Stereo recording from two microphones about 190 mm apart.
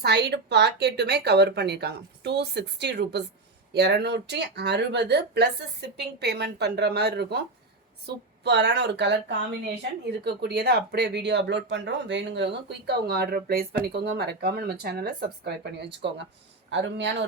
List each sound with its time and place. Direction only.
0.0 s a man's voice: 60° right (ahead or behind)